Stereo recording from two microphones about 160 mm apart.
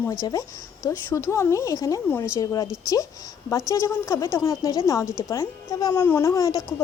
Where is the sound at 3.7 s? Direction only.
20° left (ahead or behind).